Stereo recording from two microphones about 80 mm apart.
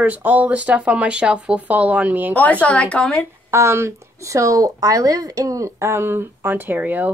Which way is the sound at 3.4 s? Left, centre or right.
Right.